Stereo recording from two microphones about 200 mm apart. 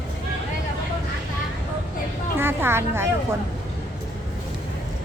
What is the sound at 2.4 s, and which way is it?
Speech, 10° right (ahead or behind).